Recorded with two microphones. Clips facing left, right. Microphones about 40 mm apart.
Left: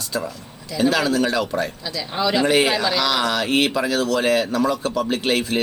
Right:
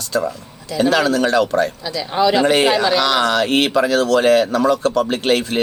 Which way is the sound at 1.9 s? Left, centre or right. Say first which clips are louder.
Right 5 dB; centre.